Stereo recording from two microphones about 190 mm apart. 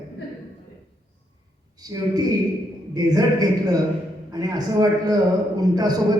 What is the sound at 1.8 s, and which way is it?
A man's voice, 20° right (ahead or behind).